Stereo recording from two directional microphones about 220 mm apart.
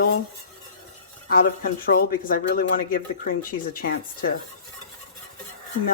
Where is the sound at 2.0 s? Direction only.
40° left (ahead or behind).